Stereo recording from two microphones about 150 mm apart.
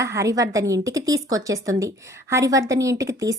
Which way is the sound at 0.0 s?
20° right (ahead or behind).